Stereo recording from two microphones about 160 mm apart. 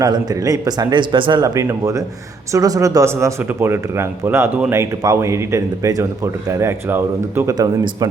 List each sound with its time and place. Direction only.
0.0 s speech: 25° right (ahead or behind)